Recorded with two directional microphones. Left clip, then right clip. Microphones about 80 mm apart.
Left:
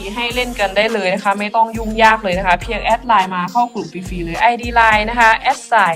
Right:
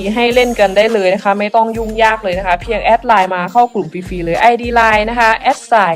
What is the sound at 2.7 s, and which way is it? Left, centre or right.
Music, right.